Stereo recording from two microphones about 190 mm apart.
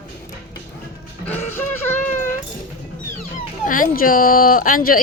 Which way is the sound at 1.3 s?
10° left (ahead or behind).